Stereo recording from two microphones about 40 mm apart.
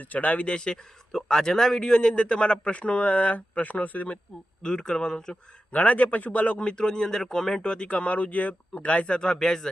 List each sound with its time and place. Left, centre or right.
0.0 s speech: left
0.4 s a man's voice: left
4.6 s a man's voice: centre
5.7 s speech: left
6.6 s a man's voice: left